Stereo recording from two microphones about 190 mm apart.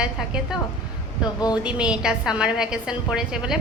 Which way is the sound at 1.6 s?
5° right (ahead or behind).